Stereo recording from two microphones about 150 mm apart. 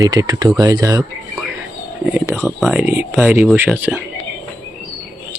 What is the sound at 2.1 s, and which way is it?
Speech, centre (ahead or behind).